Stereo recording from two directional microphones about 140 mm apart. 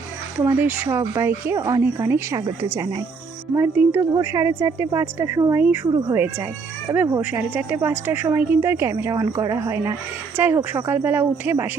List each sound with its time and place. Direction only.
0.3 s speech: 15° right (ahead or behind)
3.5 s a woman's voice: 15° right (ahead or behind)